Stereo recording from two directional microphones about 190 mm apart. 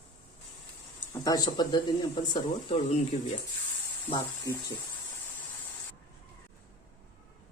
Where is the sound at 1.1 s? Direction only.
20° left (ahead or behind).